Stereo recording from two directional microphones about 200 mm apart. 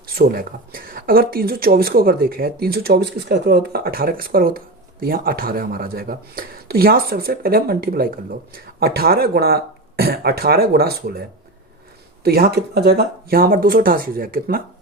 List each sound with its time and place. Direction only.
0.0 s speech: 50° right (ahead or behind)
12.2 s speech: 50° right (ahead or behind)